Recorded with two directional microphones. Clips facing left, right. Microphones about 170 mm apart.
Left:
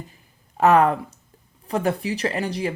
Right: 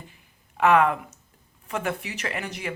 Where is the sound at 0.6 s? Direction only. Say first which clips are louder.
Left 3 dB; 35° left (ahead or behind).